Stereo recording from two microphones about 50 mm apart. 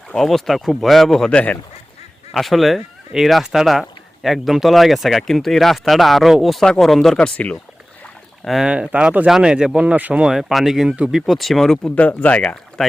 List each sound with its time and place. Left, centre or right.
0.2 s speech: centre
1.3 s speech: left
2.3 s speech: centre
8.6 s speech: centre
9.8 s speech: right
10.2 s speech: centre
10.8 s speech: right
11.1 s speech: centre
11.9 s speech: left
12.8 s speech: centre